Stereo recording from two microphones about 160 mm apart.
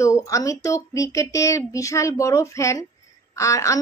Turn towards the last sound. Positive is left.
turn(degrees=20)  # may be behind; listen again after turning